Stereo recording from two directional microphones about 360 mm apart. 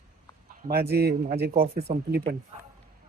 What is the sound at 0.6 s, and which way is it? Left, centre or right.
A man's voice, right.